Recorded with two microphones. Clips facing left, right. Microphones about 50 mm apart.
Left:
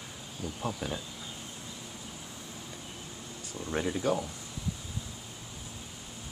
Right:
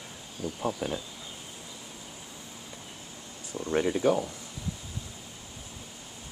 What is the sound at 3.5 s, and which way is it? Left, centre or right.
Speech, centre.